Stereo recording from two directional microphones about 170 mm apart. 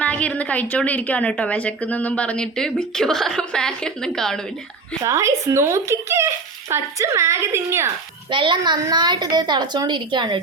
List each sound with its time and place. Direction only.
0.0 s a woman's voice: 5° left (ahead or behind)
5.0 s speech: 20° right (ahead or behind)
8.3 s a woman's voice: 30° right (ahead or behind)